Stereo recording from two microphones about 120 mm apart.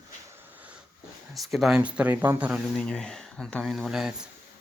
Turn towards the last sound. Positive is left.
turn(degrees=-5)  # may be behind; listen again after turning